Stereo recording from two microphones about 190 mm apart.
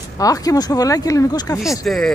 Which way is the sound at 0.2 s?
20° left (ahead or behind).